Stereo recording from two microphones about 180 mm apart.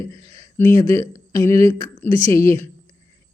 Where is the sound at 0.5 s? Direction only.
15° left (ahead or behind).